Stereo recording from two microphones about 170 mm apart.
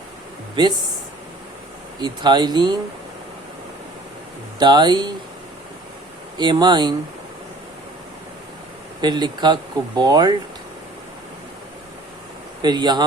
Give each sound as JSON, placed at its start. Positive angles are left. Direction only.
{"t": 0.6, "sound": "speech", "side_deg": -25}
{"t": 2.0, "sound": "speech", "side_deg": -25}
{"t": 4.6, "sound": "speech", "side_deg": -25}
{"t": 6.3, "sound": "speech", "side_deg": -25}
{"t": 9.0, "sound": "speech", "side_deg": -25}
{"t": 12.6, "sound": "speech", "side_deg": -25}